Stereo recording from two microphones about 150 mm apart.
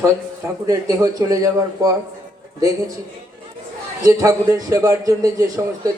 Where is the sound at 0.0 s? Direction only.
20° right (ahead or behind).